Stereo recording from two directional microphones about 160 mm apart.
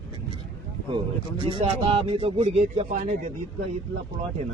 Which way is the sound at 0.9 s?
30° right (ahead or behind).